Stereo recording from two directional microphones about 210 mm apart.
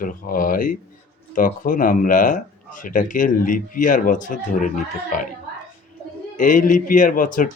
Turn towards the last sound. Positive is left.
turn(degrees=40)  # may be behind; listen again after turning